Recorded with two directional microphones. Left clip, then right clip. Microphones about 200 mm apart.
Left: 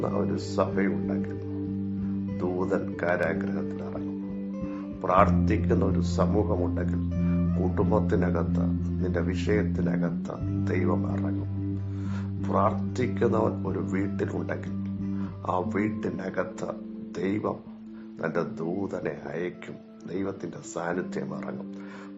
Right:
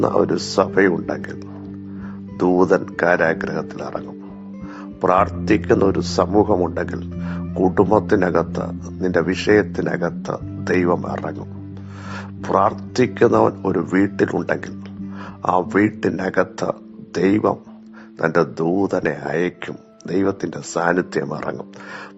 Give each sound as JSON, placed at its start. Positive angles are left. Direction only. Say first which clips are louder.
{"t": 0.0, "sound": "speech", "louder": "right 12 dB", "side_deg": -45}
{"t": 2.4, "sound": "speech", "louder": "right 13 dB", "side_deg": -45}
{"t": 4.9, "sound": "speech", "louder": "right 6 dB", "side_deg": -40}
{"t": 7.8, "sound": "speech", "louder": "right 10 dB", "side_deg": -40}